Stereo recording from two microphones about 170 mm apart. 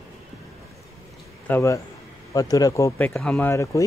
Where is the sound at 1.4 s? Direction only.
15° left (ahead or behind).